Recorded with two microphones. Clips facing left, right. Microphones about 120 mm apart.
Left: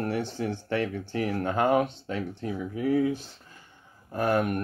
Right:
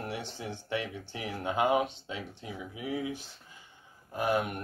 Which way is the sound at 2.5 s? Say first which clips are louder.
Left 10 dB; 45° left (ahead or behind).